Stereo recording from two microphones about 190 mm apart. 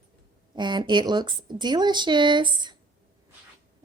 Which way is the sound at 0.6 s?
25° right (ahead or behind).